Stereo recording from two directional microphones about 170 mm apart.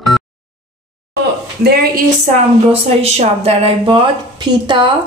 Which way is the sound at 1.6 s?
65° right (ahead or behind).